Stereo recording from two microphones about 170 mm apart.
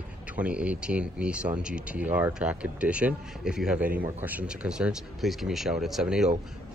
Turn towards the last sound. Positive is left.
turn(degrees=-5)  # may be behind; listen again after turning